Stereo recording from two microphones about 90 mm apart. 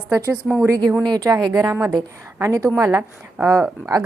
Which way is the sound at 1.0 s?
45° right (ahead or behind).